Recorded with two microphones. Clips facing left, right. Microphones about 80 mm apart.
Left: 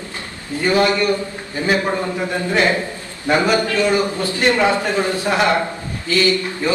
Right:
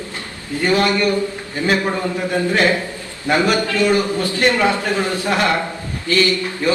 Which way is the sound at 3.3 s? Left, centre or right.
Left.